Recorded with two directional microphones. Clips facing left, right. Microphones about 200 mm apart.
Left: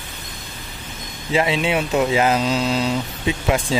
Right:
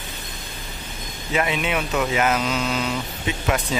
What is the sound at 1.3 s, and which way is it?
Speech, 25° left (ahead or behind).